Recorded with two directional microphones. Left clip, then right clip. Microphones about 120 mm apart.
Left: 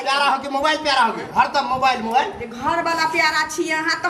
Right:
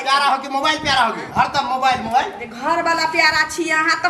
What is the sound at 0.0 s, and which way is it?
A woman's voice, 5° right (ahead or behind).